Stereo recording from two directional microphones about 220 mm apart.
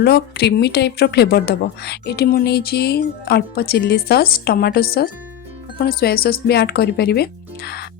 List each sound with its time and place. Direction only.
0.0 s a woman's voice: 50° left (ahead or behind)